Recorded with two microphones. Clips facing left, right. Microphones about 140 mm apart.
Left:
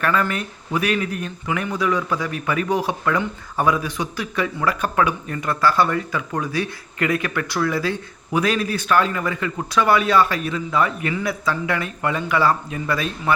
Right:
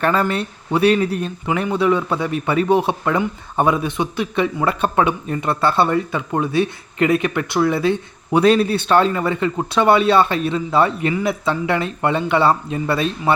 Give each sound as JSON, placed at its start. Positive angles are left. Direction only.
{"t": 0.0, "sound": "speech", "side_deg": -30}